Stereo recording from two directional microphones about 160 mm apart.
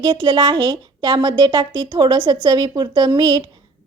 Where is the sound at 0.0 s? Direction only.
30° right (ahead or behind).